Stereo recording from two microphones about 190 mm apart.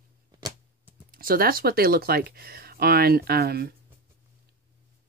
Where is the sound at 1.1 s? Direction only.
50° right (ahead or behind).